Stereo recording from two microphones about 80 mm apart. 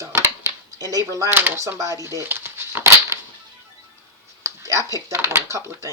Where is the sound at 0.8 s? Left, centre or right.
Right.